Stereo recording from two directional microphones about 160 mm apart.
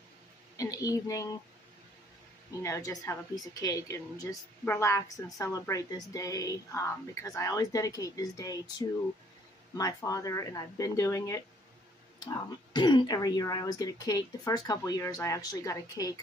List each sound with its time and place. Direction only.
0.6 s speech: 20° left (ahead or behind)
2.6 s speech: 20° left (ahead or behind)
12.7 s speech: 25° left (ahead or behind)